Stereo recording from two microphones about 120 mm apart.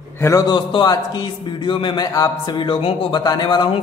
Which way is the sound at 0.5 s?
40° left (ahead or behind).